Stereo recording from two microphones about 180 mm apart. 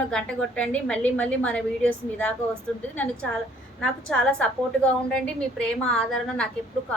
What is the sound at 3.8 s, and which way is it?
A woman's voice, 5° left (ahead or behind).